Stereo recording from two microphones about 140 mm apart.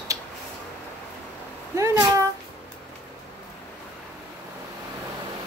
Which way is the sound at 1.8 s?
25° right (ahead or behind).